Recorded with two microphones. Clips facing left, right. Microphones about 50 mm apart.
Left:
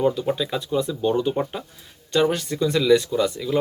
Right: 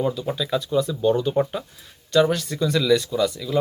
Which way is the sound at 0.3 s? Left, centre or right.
Centre.